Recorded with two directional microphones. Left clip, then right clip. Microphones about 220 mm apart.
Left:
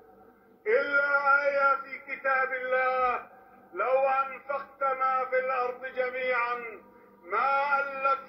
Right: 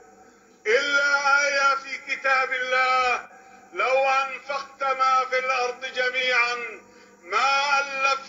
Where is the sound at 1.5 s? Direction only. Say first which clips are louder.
Right 3 dB; 70° right (ahead or behind).